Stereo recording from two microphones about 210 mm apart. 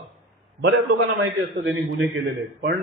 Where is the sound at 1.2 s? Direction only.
60° right (ahead or behind).